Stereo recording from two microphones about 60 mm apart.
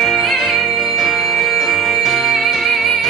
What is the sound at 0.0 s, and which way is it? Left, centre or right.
Music, centre.